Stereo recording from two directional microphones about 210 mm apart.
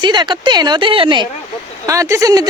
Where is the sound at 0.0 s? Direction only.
20° right (ahead or behind).